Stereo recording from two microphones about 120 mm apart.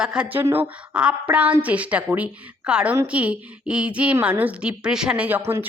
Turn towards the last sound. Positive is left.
turn(degrees=-20)  # may be behind; listen again after turning